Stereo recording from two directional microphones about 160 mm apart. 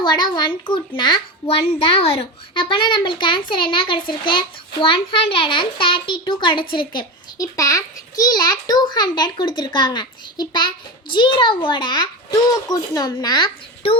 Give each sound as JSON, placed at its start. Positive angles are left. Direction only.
{"t": 0.0, "sound": "a child's voice", "side_deg": 25}